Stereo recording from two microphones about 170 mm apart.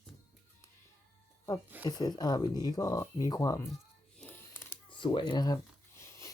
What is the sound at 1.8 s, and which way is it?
Speech, 25° left (ahead or behind).